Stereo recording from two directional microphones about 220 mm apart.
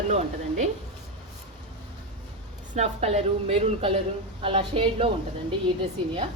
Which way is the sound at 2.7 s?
30° right (ahead or behind).